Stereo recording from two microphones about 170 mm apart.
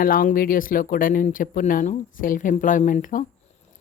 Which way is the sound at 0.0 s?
55° left (ahead or behind).